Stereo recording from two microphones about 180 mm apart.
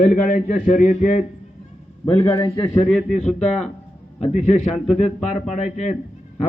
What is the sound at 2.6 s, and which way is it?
Speech, 10° left (ahead or behind).